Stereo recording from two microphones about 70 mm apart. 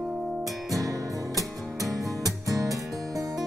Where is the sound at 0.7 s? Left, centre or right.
Right.